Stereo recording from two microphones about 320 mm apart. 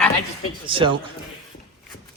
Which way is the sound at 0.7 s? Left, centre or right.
Centre.